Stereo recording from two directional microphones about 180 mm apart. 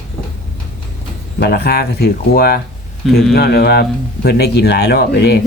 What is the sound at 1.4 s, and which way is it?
Speech, 60° left (ahead or behind).